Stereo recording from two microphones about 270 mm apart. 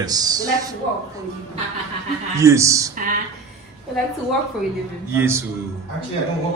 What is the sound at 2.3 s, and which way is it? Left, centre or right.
Speech, centre.